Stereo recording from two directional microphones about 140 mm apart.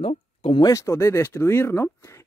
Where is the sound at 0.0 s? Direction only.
40° left (ahead or behind).